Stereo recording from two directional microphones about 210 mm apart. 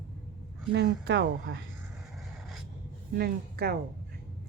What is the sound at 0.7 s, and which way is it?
Speech, 55° right (ahead or behind).